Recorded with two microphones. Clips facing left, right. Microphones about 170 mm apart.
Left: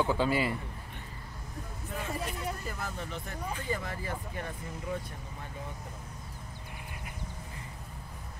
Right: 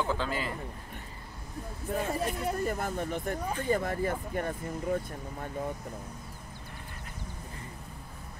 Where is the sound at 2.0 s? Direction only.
40° right (ahead or behind).